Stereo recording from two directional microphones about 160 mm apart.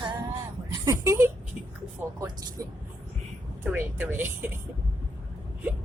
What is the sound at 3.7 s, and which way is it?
Speech, 10° right (ahead or behind).